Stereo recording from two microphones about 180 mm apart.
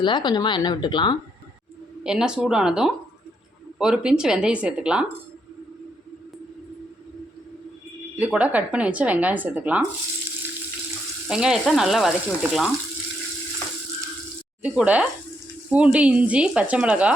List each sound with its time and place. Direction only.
0.0 s speech: 25° left (ahead or behind)
2.0 s speech: 5° right (ahead or behind)
8.2 s speech: 5° right (ahead or behind)
11.3 s speech: 5° right (ahead or behind)
14.6 s speech: 5° right (ahead or behind)